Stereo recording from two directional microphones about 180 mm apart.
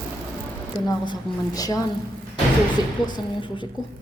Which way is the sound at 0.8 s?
20° left (ahead or behind).